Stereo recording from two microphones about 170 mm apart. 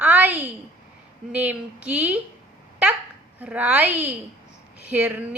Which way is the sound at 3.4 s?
10° right (ahead or behind).